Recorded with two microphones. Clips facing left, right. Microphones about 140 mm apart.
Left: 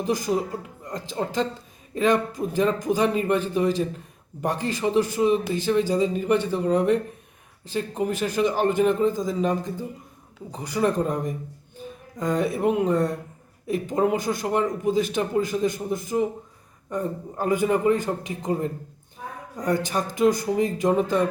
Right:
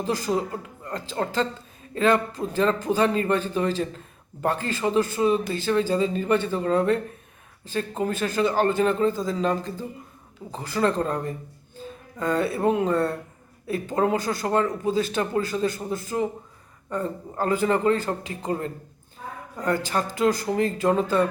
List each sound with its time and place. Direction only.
0.0 s a man's voice: 15° left (ahead or behind)